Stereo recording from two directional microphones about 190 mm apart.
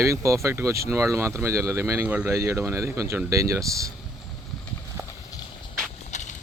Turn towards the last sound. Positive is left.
turn(degrees=40)  # may be behind; listen again after turning